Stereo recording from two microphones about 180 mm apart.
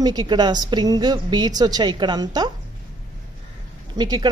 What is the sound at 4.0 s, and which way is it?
Speech, 25° right (ahead or behind).